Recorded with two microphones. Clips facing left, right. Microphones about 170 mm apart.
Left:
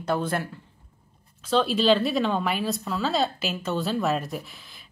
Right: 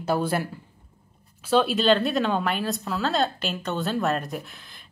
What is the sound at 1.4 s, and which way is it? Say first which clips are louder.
Speech: right 1 dB; 5° right (ahead or behind).